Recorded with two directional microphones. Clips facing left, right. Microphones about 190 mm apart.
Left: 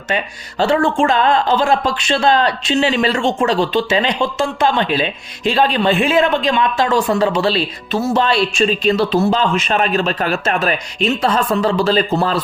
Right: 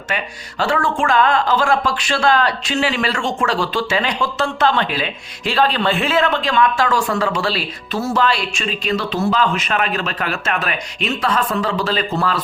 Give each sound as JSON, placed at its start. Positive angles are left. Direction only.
{"t": 0.6, "sound": "a man's voice", "side_deg": 25}